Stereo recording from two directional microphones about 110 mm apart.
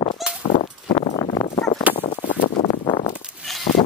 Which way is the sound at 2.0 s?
65° left (ahead or behind).